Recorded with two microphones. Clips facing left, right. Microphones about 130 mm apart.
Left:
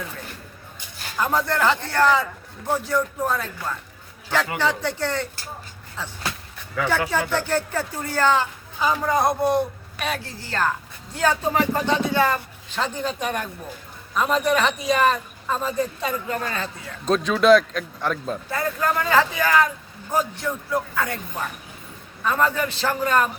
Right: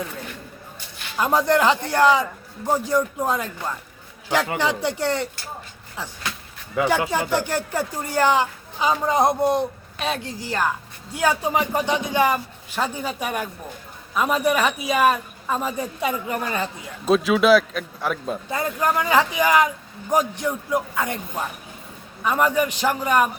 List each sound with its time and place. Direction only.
1.1 s speech: 15° right (ahead or behind)
18.5 s speech: 20° right (ahead or behind)
22.2 s speech: 15° right (ahead or behind)